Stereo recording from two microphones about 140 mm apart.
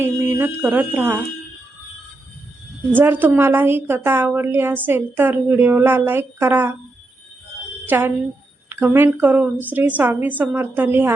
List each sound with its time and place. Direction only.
0.0 s a woman's voice: 20° right (ahead or behind)
2.9 s a woman's voice: 15° right (ahead or behind)
7.9 s a woman's voice: 15° right (ahead or behind)